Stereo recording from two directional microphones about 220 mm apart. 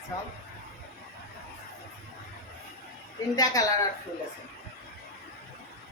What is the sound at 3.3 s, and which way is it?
Speech, 15° left (ahead or behind).